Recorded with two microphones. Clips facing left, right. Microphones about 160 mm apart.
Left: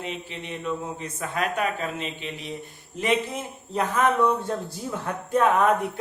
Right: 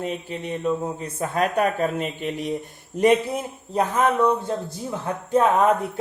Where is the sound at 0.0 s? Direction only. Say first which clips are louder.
Right 5 dB; 40° right (ahead or behind).